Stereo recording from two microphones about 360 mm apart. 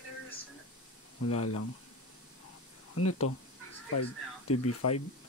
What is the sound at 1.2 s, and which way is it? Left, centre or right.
Speech, left.